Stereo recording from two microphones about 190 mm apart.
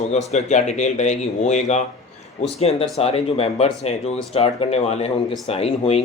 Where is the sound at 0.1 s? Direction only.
35° left (ahead or behind).